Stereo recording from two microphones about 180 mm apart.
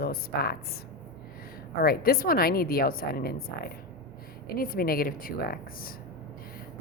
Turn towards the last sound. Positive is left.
turn(degrees=55)  # may be behind; listen again after turning